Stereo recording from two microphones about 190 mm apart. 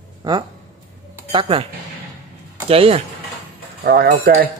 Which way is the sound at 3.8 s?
50° right (ahead or behind).